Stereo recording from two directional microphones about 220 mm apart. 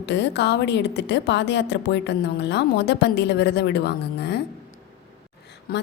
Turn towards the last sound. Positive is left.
turn(degrees=45)  # may be behind; listen again after turning